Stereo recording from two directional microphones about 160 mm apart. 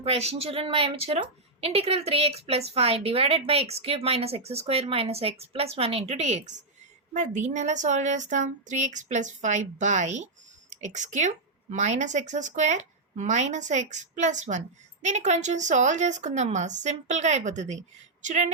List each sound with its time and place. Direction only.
0.0 s a woman's voice: 40° right (ahead or behind)